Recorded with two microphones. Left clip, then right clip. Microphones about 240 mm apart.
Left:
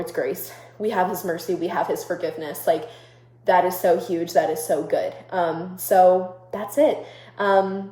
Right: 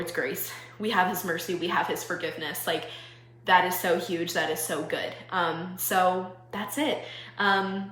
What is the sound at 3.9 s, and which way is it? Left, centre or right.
A woman's voice, centre.